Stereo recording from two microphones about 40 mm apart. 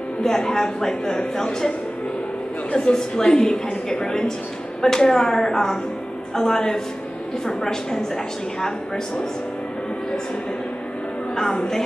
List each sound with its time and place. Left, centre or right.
0.2 s a woman's voice: centre
2.7 s a woman's voice: left
11.5 s a woman's voice: centre